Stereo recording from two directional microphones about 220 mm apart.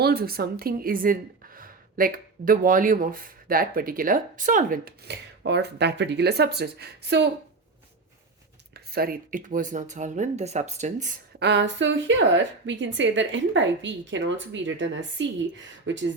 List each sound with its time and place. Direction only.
0.0 s a woman's voice: 45° right (ahead or behind)
5.4 s a woman's voice: 50° right (ahead or behind)
8.7 s a woman's voice: 45° right (ahead or behind)
11.3 s a woman's voice: 50° right (ahead or behind)